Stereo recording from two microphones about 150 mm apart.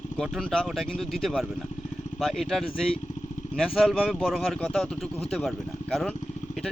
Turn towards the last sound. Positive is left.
turn(degrees=0)  # may be behind; listen again after turning